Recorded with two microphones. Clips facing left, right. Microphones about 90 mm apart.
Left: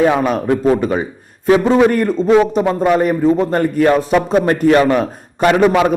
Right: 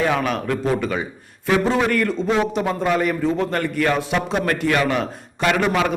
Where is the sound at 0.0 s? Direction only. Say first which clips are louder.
Left 7 dB; 35° left (ahead or behind).